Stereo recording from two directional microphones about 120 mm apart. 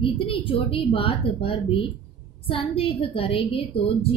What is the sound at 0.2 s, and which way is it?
A woman's voice, 45° left (ahead or behind).